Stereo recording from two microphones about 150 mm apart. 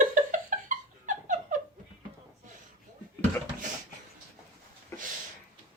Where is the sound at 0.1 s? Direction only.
60° right (ahead or behind).